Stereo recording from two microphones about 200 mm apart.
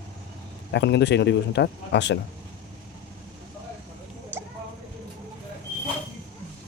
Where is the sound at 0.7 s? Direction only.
60° left (ahead or behind).